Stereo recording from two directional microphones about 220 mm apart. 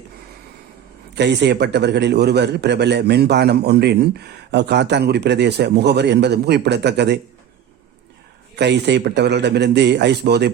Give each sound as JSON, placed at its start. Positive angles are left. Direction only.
{"t": 1.1, "sound": "a man's voice", "side_deg": -50}
{"t": 8.5, "sound": "a man's voice", "side_deg": -50}